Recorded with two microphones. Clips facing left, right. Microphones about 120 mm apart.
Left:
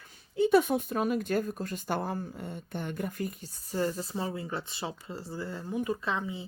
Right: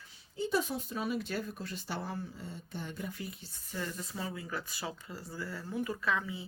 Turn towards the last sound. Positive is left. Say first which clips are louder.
# left 1 dB
turn(degrees=25)  # may be behind; listen again after turning